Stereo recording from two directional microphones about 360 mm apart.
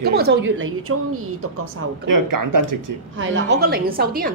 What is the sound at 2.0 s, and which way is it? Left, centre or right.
Speech, right.